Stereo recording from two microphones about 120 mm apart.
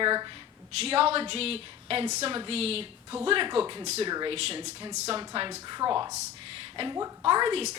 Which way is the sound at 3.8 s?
65° right (ahead or behind).